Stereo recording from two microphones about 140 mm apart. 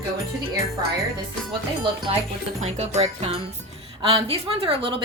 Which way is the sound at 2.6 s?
55° right (ahead or behind).